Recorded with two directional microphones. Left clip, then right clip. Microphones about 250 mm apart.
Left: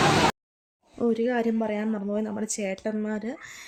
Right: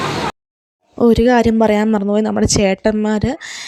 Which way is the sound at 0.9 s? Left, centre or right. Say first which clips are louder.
Right 13 dB; right.